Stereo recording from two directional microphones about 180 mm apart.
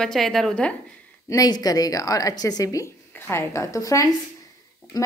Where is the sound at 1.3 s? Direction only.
20° left (ahead or behind).